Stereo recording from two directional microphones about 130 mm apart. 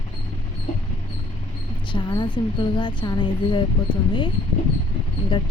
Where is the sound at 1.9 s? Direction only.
35° left (ahead or behind).